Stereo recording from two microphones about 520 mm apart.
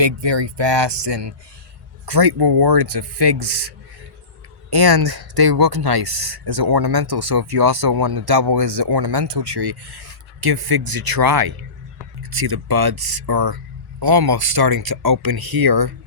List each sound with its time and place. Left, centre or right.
0.0 s speech: right